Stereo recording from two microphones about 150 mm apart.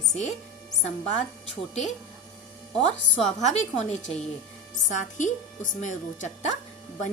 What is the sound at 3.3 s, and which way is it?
A woman's voice, 50° left (ahead or behind).